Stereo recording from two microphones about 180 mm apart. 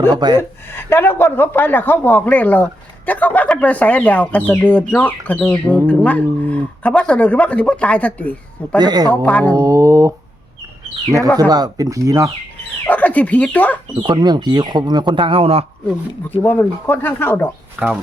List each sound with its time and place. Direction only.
0.1 s speech: 25° right (ahead or behind)
0.3 s speech: 15° left (ahead or behind)
8.8 s speech: 20° right (ahead or behind)
9.2 s speech: 10° left (ahead or behind)
9.6 s speech: 15° right (ahead or behind)
11.3 s speech: 20° right (ahead or behind)
12.8 s speech: 10° left (ahead or behind)
14.0 s speech: 25° right (ahead or behind)
15.9 s speech: 10° left (ahead or behind)
17.8 s speech: 5° right (ahead or behind)